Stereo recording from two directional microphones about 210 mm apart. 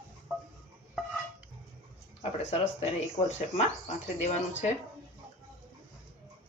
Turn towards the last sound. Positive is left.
turn(degrees=35)  # may be behind; listen again after turning